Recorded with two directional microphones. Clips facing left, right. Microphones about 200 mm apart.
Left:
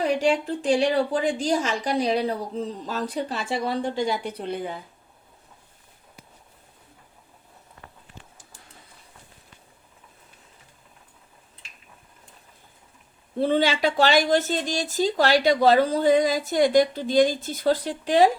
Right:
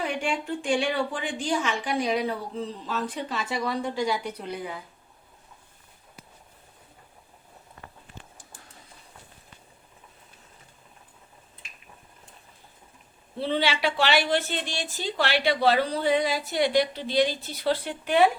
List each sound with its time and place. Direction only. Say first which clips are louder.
0.0 s a woman's voice: left 7 dB; 35° left (ahead or behind)
13.4 s a woman's voice: left 5 dB; 45° left (ahead or behind)